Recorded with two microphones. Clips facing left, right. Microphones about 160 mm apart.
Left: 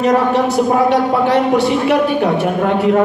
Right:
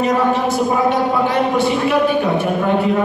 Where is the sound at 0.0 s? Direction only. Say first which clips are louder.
Left 3 dB; 70° left (ahead or behind).